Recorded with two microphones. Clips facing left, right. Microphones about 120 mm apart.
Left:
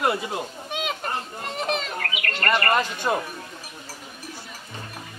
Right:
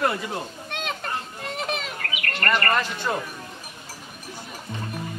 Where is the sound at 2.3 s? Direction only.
15° left (ahead or behind).